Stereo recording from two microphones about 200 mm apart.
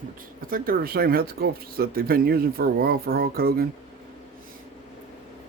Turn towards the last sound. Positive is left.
turn(degrees=-50)  # may be behind; listen again after turning